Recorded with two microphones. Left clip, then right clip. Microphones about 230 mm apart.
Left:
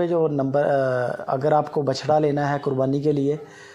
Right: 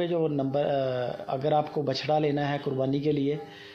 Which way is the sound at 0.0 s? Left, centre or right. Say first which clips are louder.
Left 6 dB; left.